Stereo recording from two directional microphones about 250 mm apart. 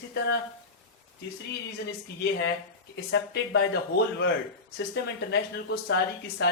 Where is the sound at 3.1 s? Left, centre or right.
Left.